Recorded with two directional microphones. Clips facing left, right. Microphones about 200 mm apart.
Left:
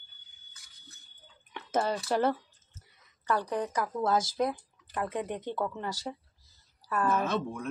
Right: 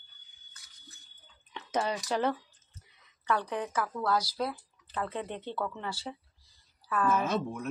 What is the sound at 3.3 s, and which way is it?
Speech, 10° left (ahead or behind).